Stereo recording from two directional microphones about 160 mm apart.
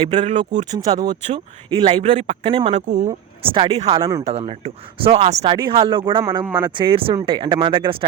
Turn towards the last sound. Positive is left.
turn(degrees=-30)  # may be behind; listen again after turning